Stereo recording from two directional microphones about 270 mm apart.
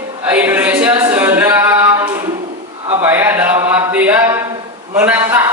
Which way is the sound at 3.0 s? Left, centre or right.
Centre.